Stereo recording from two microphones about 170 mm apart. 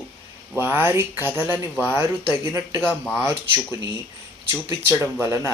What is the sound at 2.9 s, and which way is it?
Speech, centre (ahead or behind).